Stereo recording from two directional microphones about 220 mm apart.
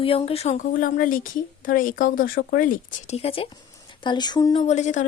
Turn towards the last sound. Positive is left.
turn(degrees=35)  # may be behind; listen again after turning